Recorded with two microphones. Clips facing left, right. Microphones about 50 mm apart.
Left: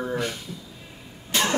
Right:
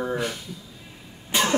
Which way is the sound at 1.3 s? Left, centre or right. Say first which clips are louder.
Right 1 dB; centre.